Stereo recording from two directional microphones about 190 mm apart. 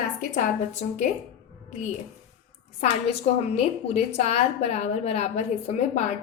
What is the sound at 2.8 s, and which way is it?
A woman's voice, 35° left (ahead or behind).